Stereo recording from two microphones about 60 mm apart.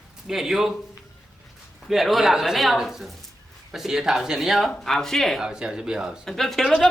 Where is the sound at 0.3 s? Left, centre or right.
Centre.